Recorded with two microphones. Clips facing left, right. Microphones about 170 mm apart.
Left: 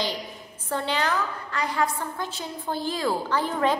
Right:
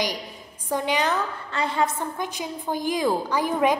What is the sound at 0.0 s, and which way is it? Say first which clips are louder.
A woman's voice: right 1 dB; 15° right (ahead or behind).